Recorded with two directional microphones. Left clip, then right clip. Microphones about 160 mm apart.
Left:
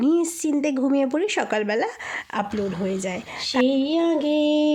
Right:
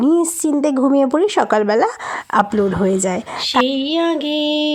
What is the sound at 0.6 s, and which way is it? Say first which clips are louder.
A woman's voice: right 8 dB; 25° right (ahead or behind).